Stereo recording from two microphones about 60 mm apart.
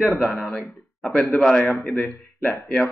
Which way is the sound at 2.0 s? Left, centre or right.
Left.